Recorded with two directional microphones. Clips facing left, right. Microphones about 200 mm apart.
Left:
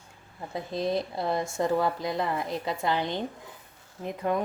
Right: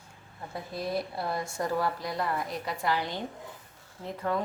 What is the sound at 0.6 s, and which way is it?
Speech, 25° left (ahead or behind).